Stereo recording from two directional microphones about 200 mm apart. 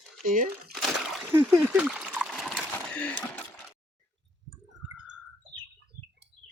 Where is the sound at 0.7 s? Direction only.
5° right (ahead or behind).